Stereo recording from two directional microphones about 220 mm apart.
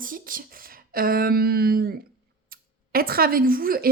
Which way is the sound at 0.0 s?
40° right (ahead or behind).